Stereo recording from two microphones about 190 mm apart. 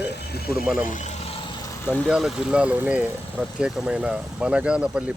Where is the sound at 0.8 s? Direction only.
40° left (ahead or behind).